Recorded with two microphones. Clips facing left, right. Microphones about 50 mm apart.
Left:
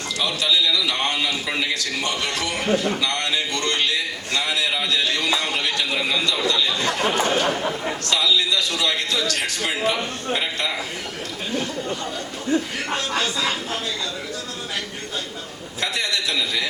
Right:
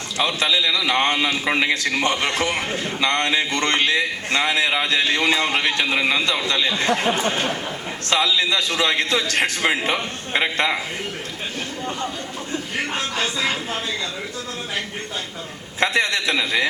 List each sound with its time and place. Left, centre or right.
0.2 s a man's voice: right
12.7 s speech: right
15.8 s a man's voice: right